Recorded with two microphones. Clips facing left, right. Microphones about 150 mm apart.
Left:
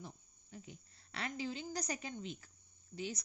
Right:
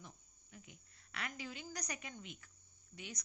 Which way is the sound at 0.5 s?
30° left (ahead or behind).